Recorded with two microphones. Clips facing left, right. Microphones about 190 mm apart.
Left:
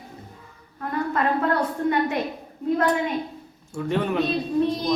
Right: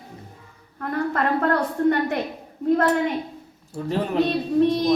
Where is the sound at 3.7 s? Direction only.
35° right (ahead or behind).